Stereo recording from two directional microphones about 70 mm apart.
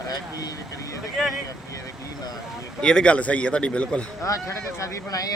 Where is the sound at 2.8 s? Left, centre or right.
Centre.